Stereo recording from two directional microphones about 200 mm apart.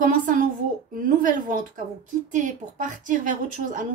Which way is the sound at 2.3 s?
40° right (ahead or behind).